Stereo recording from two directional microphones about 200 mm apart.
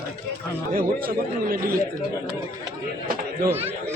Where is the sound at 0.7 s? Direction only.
50° right (ahead or behind).